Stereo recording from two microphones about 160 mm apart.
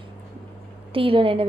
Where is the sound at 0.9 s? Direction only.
35° right (ahead or behind).